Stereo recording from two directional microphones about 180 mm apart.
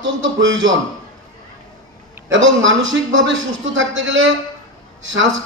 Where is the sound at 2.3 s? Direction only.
90° right.